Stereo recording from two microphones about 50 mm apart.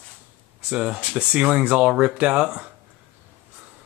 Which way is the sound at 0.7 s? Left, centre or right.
Centre.